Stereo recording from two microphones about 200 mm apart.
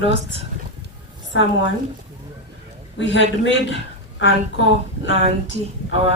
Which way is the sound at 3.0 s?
65° left (ahead or behind).